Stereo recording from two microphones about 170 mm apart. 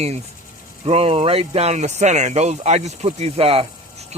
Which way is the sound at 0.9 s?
35° right (ahead or behind).